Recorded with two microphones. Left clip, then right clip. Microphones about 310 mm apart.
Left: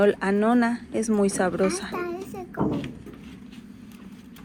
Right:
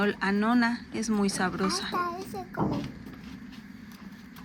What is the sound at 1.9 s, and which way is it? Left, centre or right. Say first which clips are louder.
Child singing: even; right.